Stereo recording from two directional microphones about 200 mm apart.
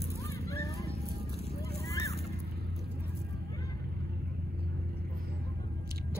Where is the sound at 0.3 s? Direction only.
15° left (ahead or behind).